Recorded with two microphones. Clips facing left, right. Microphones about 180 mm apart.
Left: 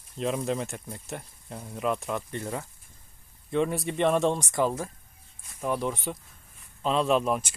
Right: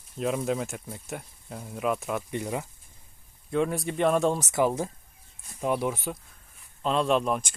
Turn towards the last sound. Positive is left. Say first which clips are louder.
# even
turn(degrees=0)  # may be behind; listen again after turning